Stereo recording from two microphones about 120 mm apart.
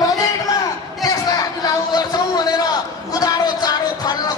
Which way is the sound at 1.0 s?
35° left (ahead or behind).